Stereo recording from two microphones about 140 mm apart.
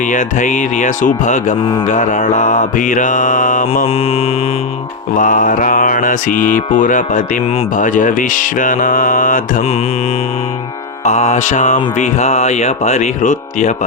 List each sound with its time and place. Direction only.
0.0 s music: 65° left (ahead or behind)
1.9 s mantra: 65° left (ahead or behind)
3.8 s mantra: 45° left (ahead or behind)
5.1 s mantra: 70° left (ahead or behind)
11.0 s music: 55° left (ahead or behind)